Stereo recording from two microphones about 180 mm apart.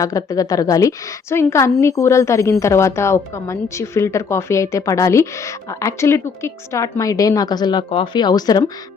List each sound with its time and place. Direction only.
0.0 s a woman's voice: 20° left (ahead or behind)